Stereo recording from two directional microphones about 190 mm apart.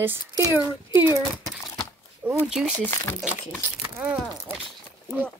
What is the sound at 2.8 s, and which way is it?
Speech, 10° left (ahead or behind).